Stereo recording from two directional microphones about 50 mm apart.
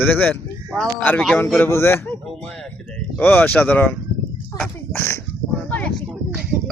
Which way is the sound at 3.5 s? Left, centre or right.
Left.